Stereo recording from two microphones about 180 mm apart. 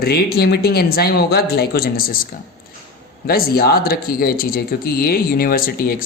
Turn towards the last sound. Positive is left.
turn(degrees=55)  # may be behind; listen again after turning